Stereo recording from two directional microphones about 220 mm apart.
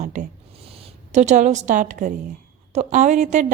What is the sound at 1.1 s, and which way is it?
A woman's voice, 35° right (ahead or behind).